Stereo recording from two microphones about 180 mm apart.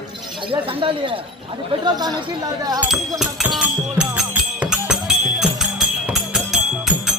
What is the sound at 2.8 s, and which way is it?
Music, 5° right (ahead or behind).